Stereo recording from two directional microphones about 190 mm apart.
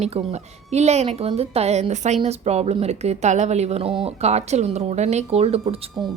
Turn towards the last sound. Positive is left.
turn(degrees=-30)  # may be behind; listen again after turning